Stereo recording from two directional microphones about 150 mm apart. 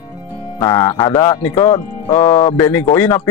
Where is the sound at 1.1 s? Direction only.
15° left (ahead or behind).